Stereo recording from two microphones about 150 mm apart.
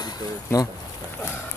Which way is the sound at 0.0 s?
25° left (ahead or behind).